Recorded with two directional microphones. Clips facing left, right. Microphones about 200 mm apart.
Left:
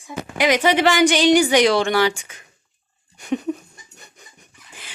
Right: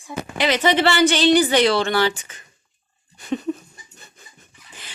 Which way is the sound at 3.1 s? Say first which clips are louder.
Left 1 dB; 15° left (ahead or behind).